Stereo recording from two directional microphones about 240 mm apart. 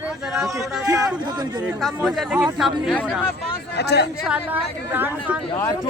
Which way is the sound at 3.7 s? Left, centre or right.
Left.